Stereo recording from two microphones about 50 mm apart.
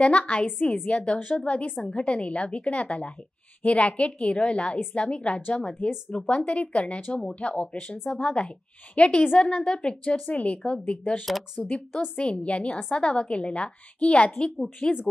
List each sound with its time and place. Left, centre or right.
0.0 s a woman's voice: left
14.6 s speech: centre